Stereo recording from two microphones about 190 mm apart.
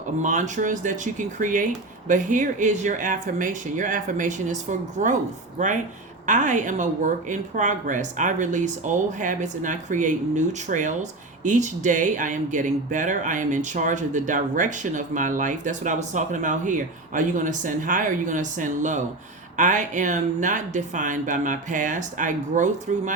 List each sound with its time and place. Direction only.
0.2 s speech: 40° right (ahead or behind)